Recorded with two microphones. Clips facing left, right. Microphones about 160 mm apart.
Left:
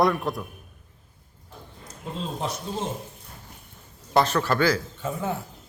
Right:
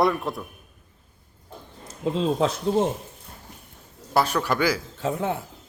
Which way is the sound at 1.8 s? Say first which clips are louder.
Right 10 dB; 90° right.